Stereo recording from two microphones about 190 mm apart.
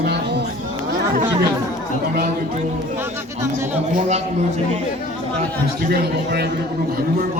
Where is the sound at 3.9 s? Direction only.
35° right (ahead or behind).